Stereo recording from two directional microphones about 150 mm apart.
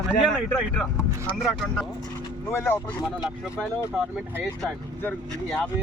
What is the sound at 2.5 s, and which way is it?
Speech, 15° left (ahead or behind).